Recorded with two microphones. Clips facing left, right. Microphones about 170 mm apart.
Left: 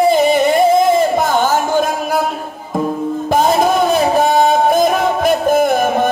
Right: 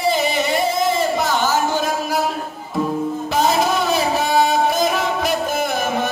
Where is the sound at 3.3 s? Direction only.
50° left (ahead or behind).